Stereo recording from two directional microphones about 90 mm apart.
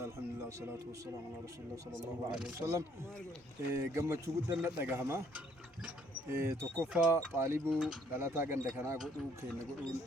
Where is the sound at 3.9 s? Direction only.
30° right (ahead or behind).